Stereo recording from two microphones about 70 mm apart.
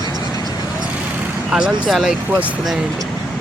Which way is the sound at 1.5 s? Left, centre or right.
Centre.